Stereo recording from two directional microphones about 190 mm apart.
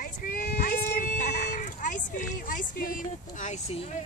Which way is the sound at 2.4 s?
45° left (ahead or behind).